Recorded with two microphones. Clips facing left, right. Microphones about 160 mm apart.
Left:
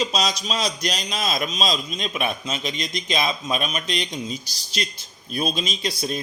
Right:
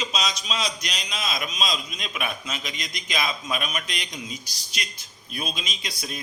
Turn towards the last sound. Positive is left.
turn(degrees=30)  # may be behind; listen again after turning